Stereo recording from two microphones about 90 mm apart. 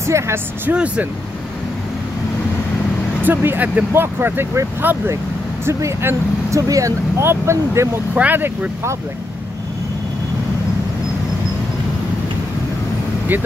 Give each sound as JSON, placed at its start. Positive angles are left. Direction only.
{"t": 0.0, "sound": "speech", "side_deg": -30}
{"t": 0.7, "sound": "speech", "side_deg": -15}
{"t": 3.3, "sound": "speech", "side_deg": -20}
{"t": 8.1, "sound": "speech", "side_deg": -20}